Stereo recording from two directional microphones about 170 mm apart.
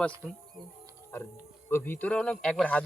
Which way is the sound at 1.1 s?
15° left (ahead or behind).